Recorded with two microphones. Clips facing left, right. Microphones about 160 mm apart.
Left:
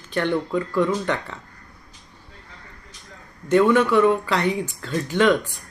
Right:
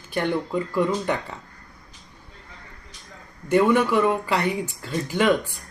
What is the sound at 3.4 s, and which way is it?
Speech, 10° right (ahead or behind).